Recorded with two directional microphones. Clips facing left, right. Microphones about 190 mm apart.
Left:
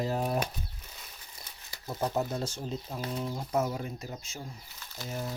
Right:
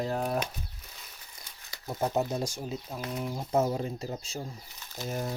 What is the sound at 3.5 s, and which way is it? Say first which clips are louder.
Speech: right 4 dB; 30° right (ahead or behind).